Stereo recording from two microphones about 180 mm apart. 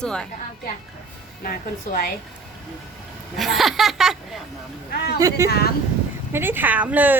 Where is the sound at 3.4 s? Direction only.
Centre (ahead or behind).